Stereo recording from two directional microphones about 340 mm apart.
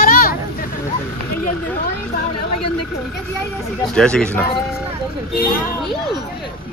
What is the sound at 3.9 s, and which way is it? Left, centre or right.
Speech, centre.